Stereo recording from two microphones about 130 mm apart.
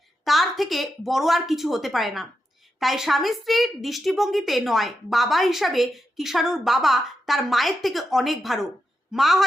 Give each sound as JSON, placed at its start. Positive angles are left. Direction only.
{"t": 0.3, "sound": "a woman's voice", "side_deg": 0}